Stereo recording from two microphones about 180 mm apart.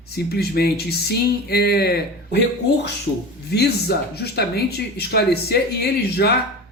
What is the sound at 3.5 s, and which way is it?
Speech, 60° left (ahead or behind).